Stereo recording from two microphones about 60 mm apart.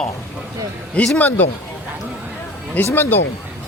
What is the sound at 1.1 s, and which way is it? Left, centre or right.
Speech, left.